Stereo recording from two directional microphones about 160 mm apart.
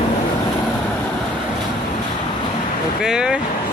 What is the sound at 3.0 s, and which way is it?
Vehicle, 5° right (ahead or behind).